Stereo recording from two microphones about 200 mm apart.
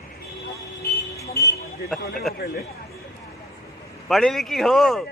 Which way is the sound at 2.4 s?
50° left (ahead or behind).